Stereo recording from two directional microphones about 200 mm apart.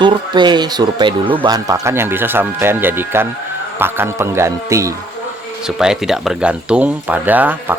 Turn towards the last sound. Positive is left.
turn(degrees=-10)  # may be behind; listen again after turning